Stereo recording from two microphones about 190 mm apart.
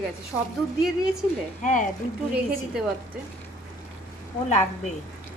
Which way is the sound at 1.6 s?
40° left (ahead or behind).